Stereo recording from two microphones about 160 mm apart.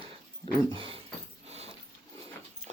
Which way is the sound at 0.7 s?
35° right (ahead or behind).